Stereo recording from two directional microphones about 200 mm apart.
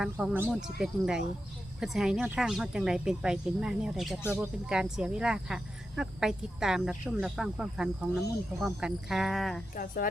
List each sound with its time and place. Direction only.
0.0 s speech: 5° right (ahead or behind)
9.7 s speech: 45° left (ahead or behind)